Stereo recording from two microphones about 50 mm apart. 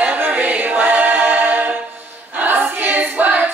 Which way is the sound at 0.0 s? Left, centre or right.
Right.